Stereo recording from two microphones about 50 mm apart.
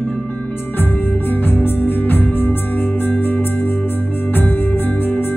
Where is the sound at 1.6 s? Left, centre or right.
Left.